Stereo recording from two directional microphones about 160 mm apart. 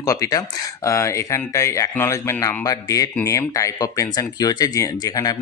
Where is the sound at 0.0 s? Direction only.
20° left (ahead or behind).